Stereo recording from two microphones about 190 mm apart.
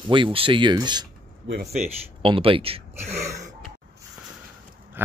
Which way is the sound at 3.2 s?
15° right (ahead or behind).